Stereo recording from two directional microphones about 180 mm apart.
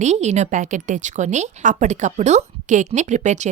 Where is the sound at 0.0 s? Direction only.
40° right (ahead or behind).